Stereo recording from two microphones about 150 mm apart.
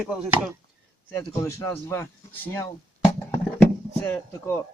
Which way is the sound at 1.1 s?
20° left (ahead or behind).